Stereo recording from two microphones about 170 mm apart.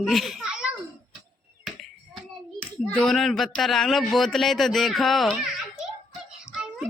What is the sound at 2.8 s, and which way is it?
A man's voice, 5° left (ahead or behind).